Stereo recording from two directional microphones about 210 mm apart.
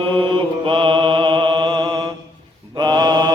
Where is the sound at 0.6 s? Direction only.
25° right (ahead or behind).